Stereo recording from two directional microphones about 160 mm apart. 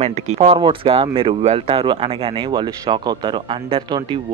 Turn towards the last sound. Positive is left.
turn(degrees=-30)  # may be behind; listen again after turning